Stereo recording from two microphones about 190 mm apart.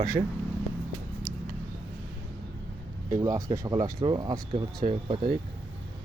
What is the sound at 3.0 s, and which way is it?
Speech, 15° right (ahead or behind).